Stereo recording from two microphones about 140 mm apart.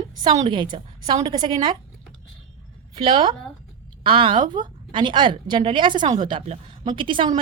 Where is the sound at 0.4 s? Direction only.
35° right (ahead or behind).